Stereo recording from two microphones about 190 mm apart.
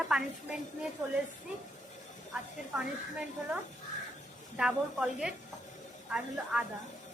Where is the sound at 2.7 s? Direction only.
5° right (ahead or behind).